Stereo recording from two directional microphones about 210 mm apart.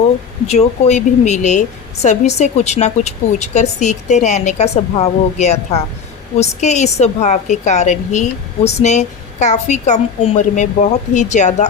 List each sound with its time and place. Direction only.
0.4 s a woman's voice: 30° left (ahead or behind)